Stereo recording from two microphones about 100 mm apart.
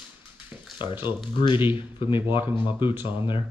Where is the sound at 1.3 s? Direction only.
55° left (ahead or behind).